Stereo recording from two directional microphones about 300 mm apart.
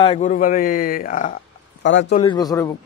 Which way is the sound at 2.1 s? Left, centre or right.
Centre.